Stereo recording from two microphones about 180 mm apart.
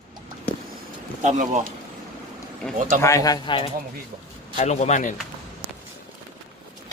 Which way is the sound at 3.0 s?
20° left (ahead or behind).